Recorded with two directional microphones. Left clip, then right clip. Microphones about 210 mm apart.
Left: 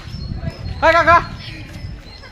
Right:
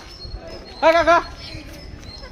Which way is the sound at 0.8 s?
20° left (ahead or behind).